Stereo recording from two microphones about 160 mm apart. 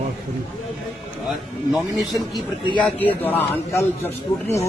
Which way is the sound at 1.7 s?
Centre (ahead or behind).